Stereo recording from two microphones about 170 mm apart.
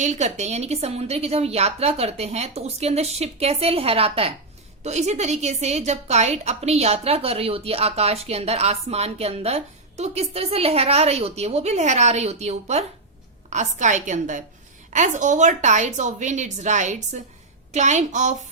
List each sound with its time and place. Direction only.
0.0 s a woman's voice: 45° right (ahead or behind)